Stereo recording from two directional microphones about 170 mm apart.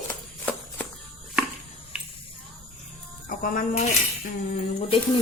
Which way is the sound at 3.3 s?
55° left (ahead or behind).